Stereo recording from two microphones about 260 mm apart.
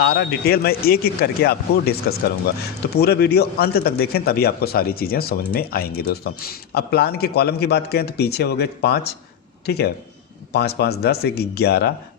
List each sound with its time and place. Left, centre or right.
0.0 s a man's voice: left